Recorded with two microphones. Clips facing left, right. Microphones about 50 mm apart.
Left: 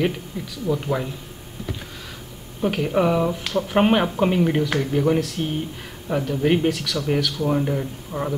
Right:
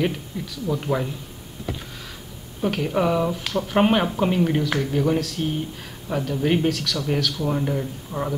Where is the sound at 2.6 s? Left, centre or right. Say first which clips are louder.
Left 2 dB; centre.